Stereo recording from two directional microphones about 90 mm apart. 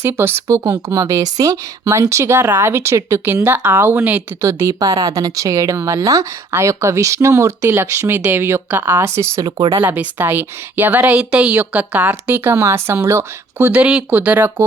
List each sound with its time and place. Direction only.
0.0 s speech: 25° right (ahead or behind)
4.7 s speech: 45° right (ahead or behind); by 9.4 s 30° right (ahead or behind)
9.4 s speech: 50° right (ahead or behind)
9.8 s speech: 20° right (ahead or behind)